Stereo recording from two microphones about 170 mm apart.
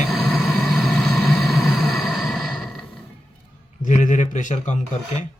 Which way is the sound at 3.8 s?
45° left (ahead or behind).